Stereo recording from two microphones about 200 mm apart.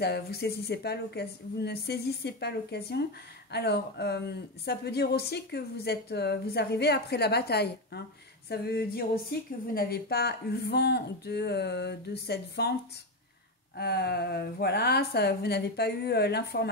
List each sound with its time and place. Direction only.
0.0 s a woman's voice: 55° left (ahead or behind)
13.7 s a woman's voice: 55° left (ahead or behind)